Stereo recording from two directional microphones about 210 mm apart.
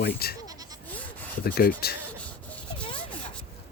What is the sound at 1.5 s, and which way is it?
Speech, 45° left (ahead or behind).